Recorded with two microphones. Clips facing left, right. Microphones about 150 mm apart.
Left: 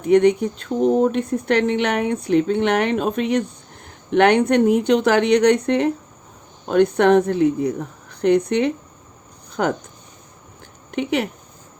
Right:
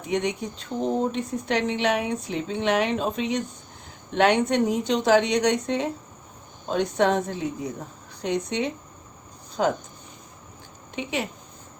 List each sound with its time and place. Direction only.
0.0 s speech: 60° left (ahead or behind)
10.9 s speech: 65° left (ahead or behind)